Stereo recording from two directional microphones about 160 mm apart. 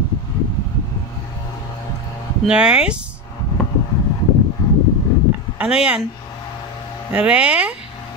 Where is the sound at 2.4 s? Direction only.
5° right (ahead or behind).